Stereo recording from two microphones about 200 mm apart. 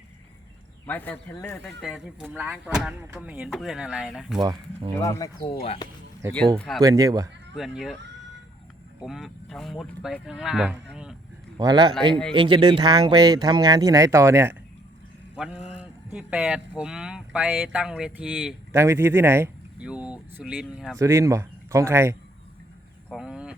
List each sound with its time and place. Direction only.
0.9 s speech: 10° left (ahead or behind)
1.8 s speech: 5° right (ahead or behind)
4.4 s speech: 20° right (ahead or behind)
4.9 s speech: 15° left (ahead or behind)
5.5 s speech: 30° left (ahead or behind)
6.6 s speech: centre (ahead or behind)
6.8 s speech: 20° right (ahead or behind)
7.5 s speech: centre (ahead or behind)
9.0 s speech: centre (ahead or behind)
11.5 s speech: 20° right (ahead or behind); by 21.0 s centre (ahead or behind)
21.0 s speech: 15° right (ahead or behind)
23.0 s a sound: 5° right (ahead or behind)